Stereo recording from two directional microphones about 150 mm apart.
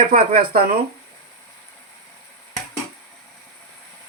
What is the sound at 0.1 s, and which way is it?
Speech, 85° right.